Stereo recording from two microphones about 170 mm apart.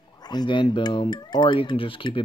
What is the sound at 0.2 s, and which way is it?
Speech, 25° left (ahead or behind).